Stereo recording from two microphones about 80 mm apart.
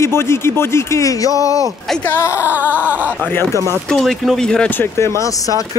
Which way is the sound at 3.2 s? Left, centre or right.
Left.